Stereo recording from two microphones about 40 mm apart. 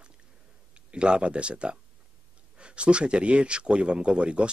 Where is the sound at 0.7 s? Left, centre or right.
Right.